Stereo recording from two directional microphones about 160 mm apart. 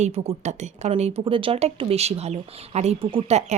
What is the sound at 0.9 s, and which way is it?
Speech, 35° right (ahead or behind).